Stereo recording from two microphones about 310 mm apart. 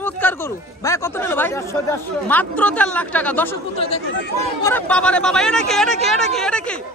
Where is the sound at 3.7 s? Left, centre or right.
Centre.